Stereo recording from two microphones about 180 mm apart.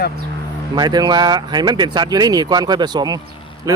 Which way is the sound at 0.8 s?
20° right (ahead or behind).